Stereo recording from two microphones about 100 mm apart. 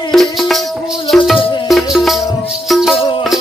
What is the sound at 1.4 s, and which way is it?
Music, 60° left (ahead or behind).